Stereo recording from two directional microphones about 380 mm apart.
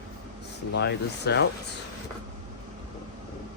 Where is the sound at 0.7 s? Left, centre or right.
Left.